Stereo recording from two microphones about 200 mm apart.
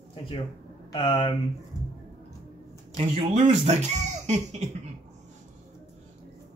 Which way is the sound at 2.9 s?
35° right (ahead or behind).